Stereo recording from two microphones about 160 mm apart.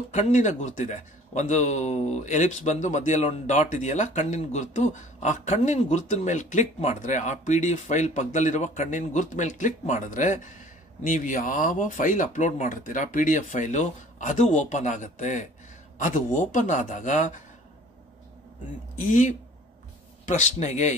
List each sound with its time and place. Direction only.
0.1 s a man's voice: 50° left (ahead or behind)
18.9 s a man's voice: 50° left (ahead or behind)